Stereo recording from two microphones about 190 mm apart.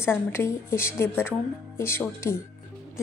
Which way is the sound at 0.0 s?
10° left (ahead or behind).